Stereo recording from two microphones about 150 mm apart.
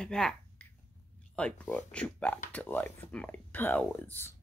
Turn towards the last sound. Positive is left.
turn(degrees=15)  # may be behind; listen again after turning